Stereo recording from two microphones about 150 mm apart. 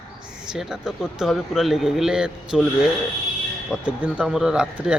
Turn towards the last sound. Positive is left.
turn(degrees=-5)  # may be behind; listen again after turning